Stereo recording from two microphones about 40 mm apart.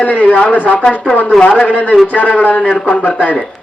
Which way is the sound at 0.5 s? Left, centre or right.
Left.